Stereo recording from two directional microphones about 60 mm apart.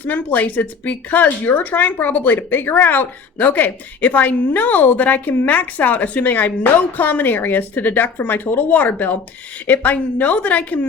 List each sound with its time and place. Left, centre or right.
0.0 s speech: left